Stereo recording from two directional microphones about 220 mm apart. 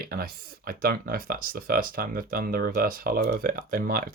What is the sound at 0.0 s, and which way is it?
Speech, 40° right (ahead or behind).